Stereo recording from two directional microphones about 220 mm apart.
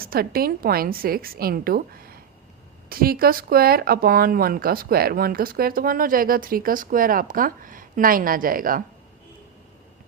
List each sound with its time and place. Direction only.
0.0 s a woman's voice: 40° right (ahead or behind)